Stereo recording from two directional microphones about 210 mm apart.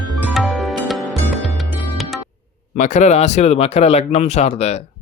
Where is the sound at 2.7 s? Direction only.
35° left (ahead or behind).